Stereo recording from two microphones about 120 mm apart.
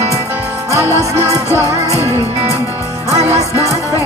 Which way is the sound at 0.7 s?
25° right (ahead or behind).